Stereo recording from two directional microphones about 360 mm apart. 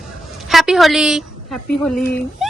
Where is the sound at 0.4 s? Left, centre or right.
Centre.